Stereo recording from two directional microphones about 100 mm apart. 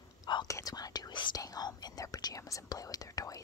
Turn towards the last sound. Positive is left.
turn(degrees=35)  # may be behind; listen again after turning